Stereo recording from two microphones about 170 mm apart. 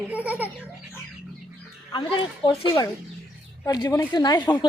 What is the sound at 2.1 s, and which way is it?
Speech, 25° left (ahead or behind).